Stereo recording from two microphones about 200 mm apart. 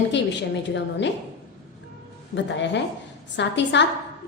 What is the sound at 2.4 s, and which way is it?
A woman's voice, 60° left (ahead or behind).